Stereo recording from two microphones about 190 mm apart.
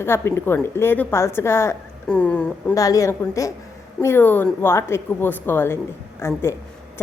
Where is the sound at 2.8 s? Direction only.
15° left (ahead or behind).